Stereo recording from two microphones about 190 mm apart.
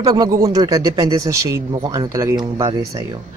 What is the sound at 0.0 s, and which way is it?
Speech, 20° right (ahead or behind).